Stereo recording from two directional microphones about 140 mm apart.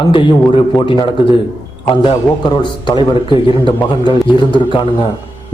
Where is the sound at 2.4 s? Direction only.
35° left (ahead or behind).